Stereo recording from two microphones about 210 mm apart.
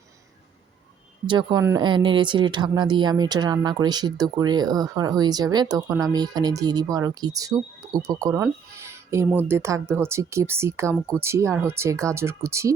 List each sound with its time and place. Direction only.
1.3 s speech: 20° right (ahead or behind)